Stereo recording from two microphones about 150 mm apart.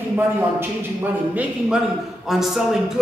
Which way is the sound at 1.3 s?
10° right (ahead or behind).